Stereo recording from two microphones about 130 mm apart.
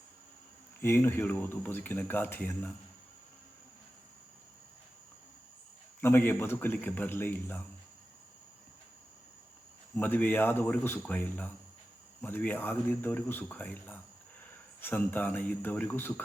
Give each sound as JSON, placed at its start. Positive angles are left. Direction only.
{"t": 0.8, "sound": "speech", "side_deg": 20}
{"t": 6.0, "sound": "speech", "side_deg": 20}
{"t": 9.9, "sound": "speech", "side_deg": 15}